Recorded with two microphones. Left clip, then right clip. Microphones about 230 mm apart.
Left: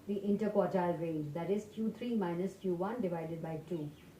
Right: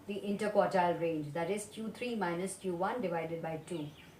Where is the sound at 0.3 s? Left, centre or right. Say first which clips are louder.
Right 4 dB; right.